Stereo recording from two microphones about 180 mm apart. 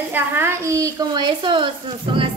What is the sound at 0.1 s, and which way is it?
A woman's voice, 15° right (ahead or behind).